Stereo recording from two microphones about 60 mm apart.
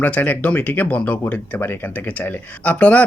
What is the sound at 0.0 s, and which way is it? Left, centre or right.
Speech, left.